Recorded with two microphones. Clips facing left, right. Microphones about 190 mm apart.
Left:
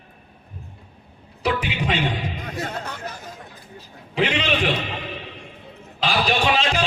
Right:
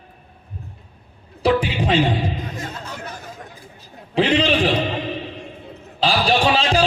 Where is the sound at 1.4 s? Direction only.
30° right (ahead or behind).